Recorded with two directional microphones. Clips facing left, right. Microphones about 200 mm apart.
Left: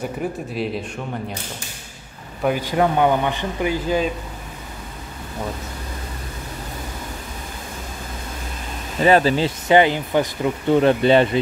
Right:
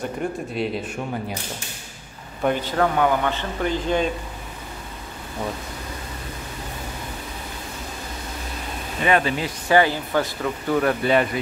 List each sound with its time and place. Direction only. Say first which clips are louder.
0.0 s speech: left 1 dB; centre (ahead or behind)
2.4 s a man's voice: left 2 dB; 10° left (ahead or behind)
9.0 s speech: left 5 dB; 30° left (ahead or behind)
9.7 s speech: left 2 dB; 20° left (ahead or behind)